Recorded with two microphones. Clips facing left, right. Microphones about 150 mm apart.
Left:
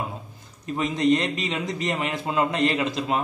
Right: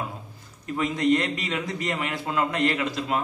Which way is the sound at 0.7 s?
25° left (ahead or behind).